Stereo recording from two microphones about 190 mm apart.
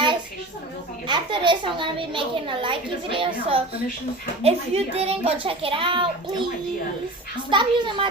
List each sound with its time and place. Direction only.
1.0 s a woman's voice: 25° right (ahead or behind)
7.5 s a woman's voice: 25° right (ahead or behind)